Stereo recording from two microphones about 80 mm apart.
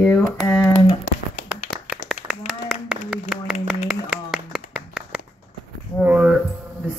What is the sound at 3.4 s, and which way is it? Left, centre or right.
Speech, centre.